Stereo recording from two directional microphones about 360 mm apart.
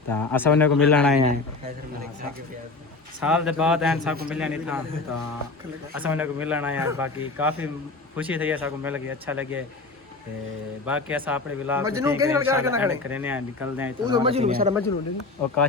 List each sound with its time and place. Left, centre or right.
0.1 s a man's voice: centre
1.2 s a man's voice: centre
3.2 s a man's voice: centre
6.0 s a man's voice: centre
10.8 s a man's voice: centre